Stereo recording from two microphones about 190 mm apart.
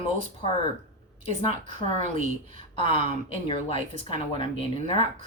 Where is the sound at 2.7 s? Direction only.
30° left (ahead or behind).